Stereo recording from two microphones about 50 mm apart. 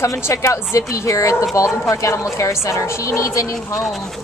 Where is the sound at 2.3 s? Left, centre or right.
Left.